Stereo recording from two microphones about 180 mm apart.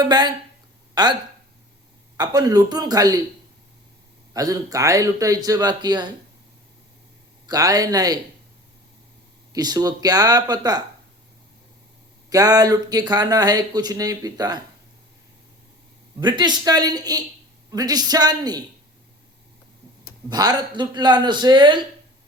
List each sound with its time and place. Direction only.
0.0 s speech: 25° right (ahead or behind)
2.1 s speech: 20° right (ahead or behind)
4.4 s speech: 20° right (ahead or behind)
7.4 s speech: 20° right (ahead or behind)
9.5 s speech: 20° right (ahead or behind)
12.3 s speech: 20° right (ahead or behind)
16.2 s speech: 25° right (ahead or behind)
20.3 s speech: 20° right (ahead or behind)